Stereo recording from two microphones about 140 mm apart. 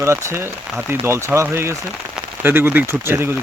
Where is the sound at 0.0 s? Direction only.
20° right (ahead or behind).